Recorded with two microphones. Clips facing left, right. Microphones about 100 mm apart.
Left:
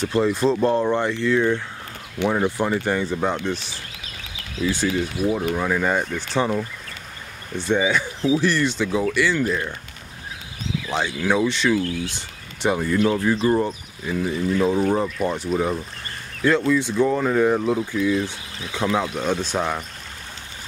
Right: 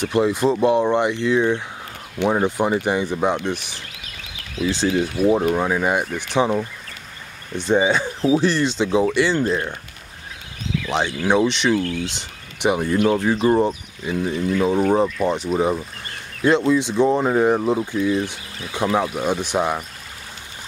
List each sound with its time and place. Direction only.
0.1 s speech: 15° right (ahead or behind)
4.6 s speech: 25° right (ahead or behind)
5.5 s speech: 15° right (ahead or behind)
11.2 s speech: 20° right (ahead or behind)
14.0 s speech: 5° right (ahead or behind)
15.2 s speech: 20° right (ahead or behind)
15.5 s speech: 5° right (ahead or behind)
16.4 s speech: 20° right (ahead or behind)